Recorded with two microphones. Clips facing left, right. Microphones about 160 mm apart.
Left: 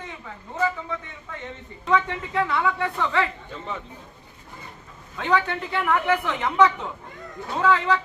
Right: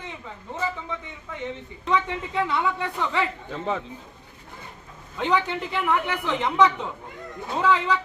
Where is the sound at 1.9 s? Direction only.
20° right (ahead or behind).